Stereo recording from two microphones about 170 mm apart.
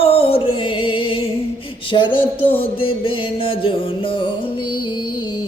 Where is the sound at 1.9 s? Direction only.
30° left (ahead or behind).